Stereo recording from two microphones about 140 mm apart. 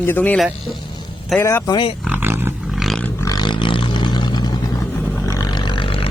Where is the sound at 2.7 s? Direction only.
Centre (ahead or behind).